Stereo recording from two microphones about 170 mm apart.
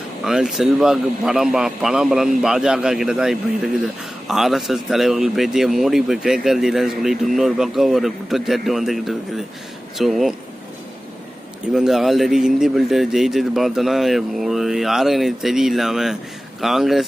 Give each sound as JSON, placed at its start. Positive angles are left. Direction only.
{"t": 0.3, "sound": "speech", "side_deg": -5}
{"t": 11.7, "sound": "speech", "side_deg": -5}